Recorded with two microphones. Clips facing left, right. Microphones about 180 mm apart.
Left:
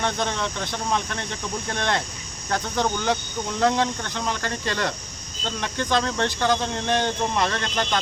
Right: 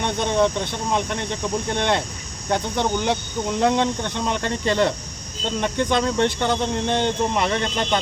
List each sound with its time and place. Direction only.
0.0 s speech: 20° right (ahead or behind)